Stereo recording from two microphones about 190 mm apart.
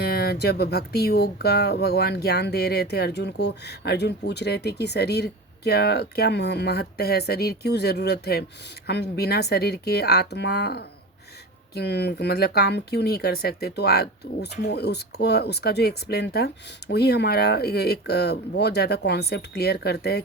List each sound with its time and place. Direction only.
0.0 s speech: 55° left (ahead or behind)